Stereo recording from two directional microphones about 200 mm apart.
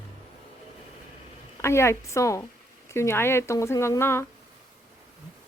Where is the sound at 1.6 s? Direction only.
15° left (ahead or behind).